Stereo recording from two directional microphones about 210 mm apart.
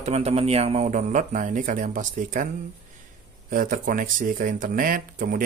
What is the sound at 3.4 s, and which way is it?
A man's voice, 40° right (ahead or behind).